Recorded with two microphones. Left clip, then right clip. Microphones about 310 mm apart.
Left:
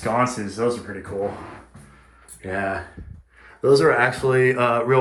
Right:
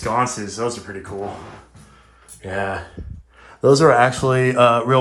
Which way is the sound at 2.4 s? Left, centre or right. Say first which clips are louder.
Right 1 dB; centre.